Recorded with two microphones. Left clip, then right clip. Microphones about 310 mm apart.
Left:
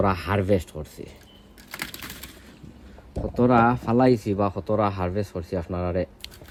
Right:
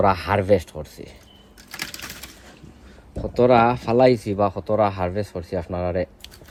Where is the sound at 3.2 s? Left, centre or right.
Centre.